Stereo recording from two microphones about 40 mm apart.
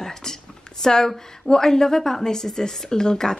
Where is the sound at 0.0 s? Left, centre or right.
Centre.